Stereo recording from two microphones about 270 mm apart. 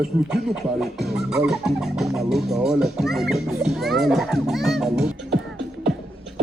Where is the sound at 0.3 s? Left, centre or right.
Centre.